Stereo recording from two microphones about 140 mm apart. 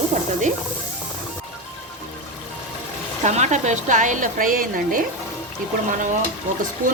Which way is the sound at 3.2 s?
55° right (ahead or behind).